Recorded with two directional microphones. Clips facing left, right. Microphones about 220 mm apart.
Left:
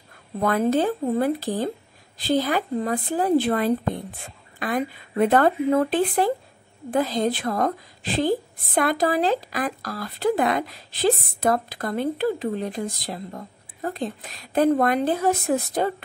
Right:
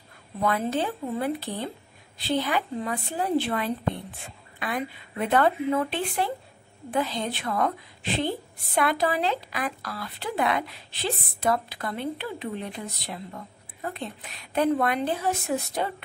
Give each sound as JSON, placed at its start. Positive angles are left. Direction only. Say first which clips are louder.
{"t": 0.4, "sound": "speech", "louder": "left 5 dB", "side_deg": 45}